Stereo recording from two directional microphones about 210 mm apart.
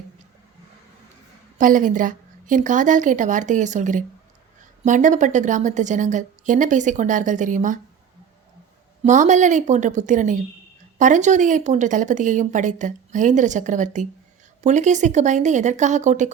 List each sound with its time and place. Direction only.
1.5 s speech: 40° right (ahead or behind)
9.0 s speech: 35° right (ahead or behind)